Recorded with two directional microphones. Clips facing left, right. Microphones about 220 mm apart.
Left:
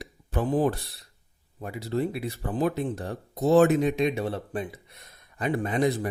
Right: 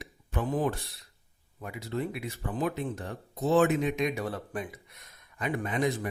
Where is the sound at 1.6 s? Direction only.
35° left (ahead or behind).